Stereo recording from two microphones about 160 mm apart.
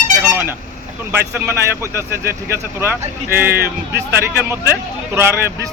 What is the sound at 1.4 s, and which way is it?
Speech, 15° right (ahead or behind).